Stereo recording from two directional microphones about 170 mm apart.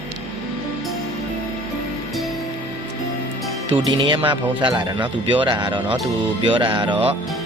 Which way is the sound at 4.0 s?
30° right (ahead or behind).